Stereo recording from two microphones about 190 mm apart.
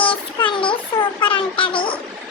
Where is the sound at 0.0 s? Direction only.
25° left (ahead or behind).